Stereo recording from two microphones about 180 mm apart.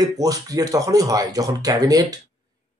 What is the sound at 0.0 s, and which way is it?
Speech, 20° right (ahead or behind).